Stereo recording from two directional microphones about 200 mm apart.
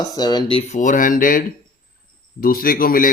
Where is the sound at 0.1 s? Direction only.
20° left (ahead or behind).